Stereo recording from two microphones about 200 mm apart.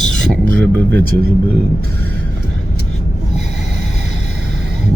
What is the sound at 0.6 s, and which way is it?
Speech, 60° right (ahead or behind).